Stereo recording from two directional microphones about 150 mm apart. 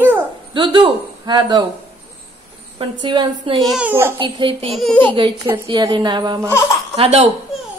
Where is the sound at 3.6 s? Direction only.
Centre (ahead or behind).